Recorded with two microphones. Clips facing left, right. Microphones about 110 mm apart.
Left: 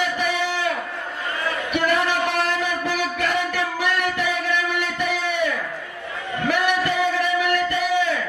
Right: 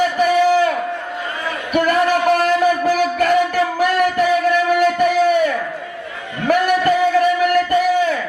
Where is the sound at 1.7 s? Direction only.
45° right (ahead or behind).